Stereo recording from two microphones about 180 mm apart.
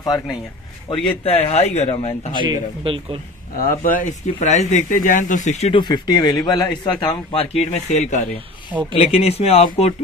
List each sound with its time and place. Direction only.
0.8 s speech: 35° left (ahead or behind)
2.3 s a man's voice: 25° right (ahead or behind)
3.5 s speech: 50° left (ahead or behind)